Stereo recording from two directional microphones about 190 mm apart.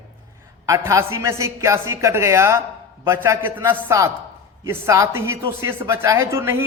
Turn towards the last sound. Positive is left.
turn(degrees=-15)  # may be behind; listen again after turning